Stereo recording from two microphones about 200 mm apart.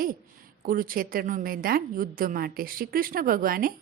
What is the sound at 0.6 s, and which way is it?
A woman's voice, 45° right (ahead or behind).